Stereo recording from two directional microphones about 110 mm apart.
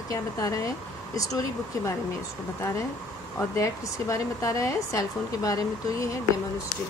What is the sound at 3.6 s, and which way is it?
Speech, 30° left (ahead or behind).